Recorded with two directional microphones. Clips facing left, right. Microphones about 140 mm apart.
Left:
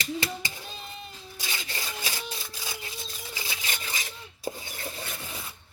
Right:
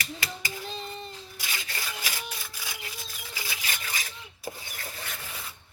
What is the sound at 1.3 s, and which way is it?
Rub, 25° left (ahead or behind).